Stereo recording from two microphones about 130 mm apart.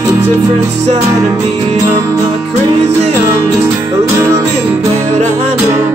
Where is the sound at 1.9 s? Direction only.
20° right (ahead or behind).